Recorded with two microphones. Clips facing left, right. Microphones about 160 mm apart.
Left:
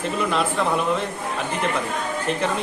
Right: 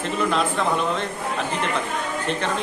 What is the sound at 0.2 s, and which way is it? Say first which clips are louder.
Speech: right 1 dB; centre (ahead or behind).